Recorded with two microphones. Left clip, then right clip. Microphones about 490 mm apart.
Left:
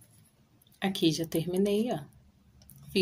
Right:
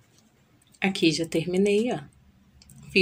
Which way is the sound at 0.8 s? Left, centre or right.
Left.